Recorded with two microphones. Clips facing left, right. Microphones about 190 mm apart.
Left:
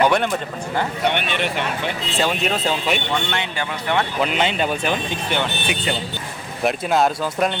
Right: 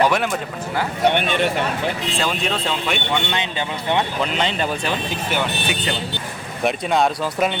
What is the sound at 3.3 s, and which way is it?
Speech, 20° right (ahead or behind).